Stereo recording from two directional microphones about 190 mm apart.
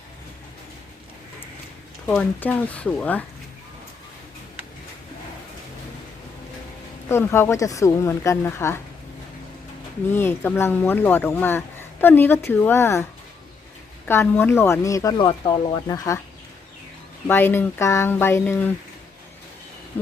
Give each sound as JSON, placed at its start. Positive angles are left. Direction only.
{"t": 2.0, "sound": "speech", "side_deg": 5}
{"t": 7.1, "sound": "speech", "side_deg": 15}
{"t": 10.1, "sound": "speech", "side_deg": 10}
{"t": 14.1, "sound": "speech", "side_deg": 10}
{"t": 17.2, "sound": "speech", "side_deg": 10}